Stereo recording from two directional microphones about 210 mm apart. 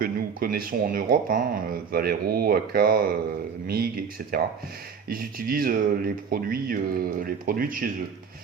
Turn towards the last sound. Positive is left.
turn(degrees=-40)  # may be behind; listen again after turning